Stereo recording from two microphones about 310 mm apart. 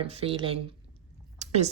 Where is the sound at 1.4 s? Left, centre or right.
Right.